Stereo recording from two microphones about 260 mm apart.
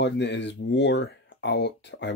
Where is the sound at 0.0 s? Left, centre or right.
Left.